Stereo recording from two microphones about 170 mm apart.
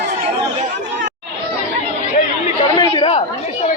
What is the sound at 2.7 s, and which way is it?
Chatter, 30° left (ahead or behind).